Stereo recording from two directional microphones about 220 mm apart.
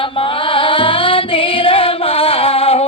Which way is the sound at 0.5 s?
25° left (ahead or behind).